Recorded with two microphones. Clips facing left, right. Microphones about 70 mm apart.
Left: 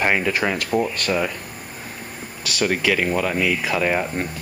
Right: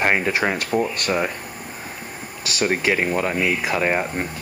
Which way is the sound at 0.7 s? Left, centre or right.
Centre.